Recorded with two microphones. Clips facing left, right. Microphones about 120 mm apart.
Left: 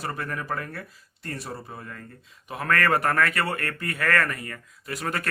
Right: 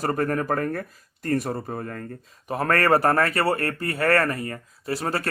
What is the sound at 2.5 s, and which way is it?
Speech, 35° right (ahead or behind).